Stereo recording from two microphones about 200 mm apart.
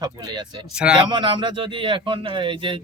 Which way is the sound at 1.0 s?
25° right (ahead or behind).